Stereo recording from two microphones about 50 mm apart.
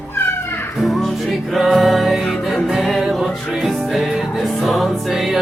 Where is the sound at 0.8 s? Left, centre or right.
Centre.